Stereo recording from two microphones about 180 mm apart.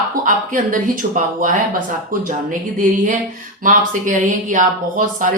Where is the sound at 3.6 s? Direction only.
45° right (ahead or behind).